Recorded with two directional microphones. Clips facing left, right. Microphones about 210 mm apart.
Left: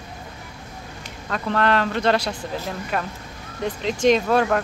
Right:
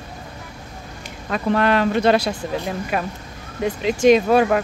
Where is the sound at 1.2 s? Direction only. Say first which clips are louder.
Right 3 dB; 10° right (ahead or behind).